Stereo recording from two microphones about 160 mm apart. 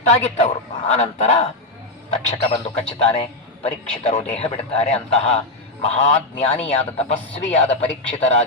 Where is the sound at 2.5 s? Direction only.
40° left (ahead or behind).